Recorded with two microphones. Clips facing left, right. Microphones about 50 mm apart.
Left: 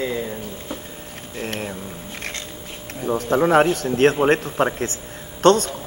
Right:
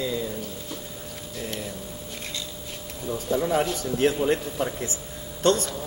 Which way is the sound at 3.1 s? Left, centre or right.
Left.